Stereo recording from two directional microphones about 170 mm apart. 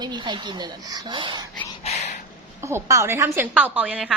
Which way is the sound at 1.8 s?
40° left (ahead or behind).